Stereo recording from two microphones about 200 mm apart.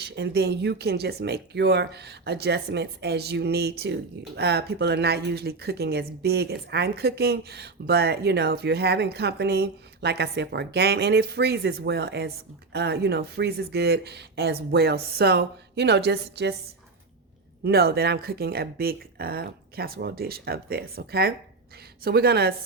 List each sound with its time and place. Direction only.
0.0 s speech: 55° right (ahead or behind)
17.6 s speech: 50° right (ahead or behind)